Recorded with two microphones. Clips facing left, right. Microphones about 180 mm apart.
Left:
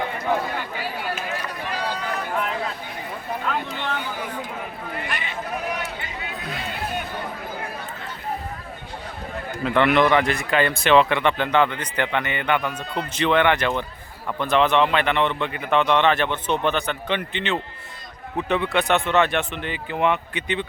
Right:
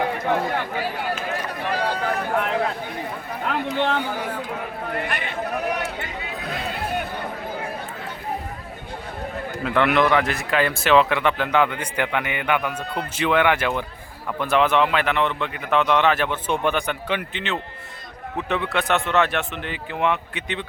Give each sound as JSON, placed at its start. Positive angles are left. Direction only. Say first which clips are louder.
{"t": 1.6, "sound": "a sound", "louder": "right 6 dB", "side_deg": -50}
{"t": 3.4, "sound": "speech", "louder": "right 7 dB", "side_deg": -55}
{"t": 9.6, "sound": "a man's voice", "louder": "left 1 dB", "side_deg": 0}